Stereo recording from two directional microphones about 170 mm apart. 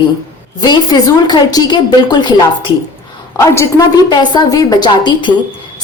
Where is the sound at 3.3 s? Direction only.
15° left (ahead or behind).